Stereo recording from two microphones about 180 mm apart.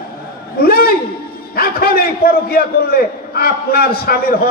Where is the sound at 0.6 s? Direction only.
55° left (ahead or behind).